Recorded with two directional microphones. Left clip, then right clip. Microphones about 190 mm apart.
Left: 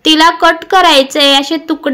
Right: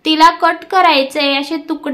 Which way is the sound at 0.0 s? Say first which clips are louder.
Left 3 dB; 20° left (ahead or behind).